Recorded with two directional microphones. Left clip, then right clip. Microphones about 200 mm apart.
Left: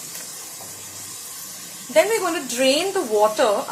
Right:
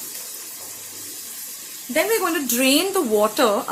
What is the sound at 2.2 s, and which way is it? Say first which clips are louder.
Speech: even; 45° right (ahead or behind).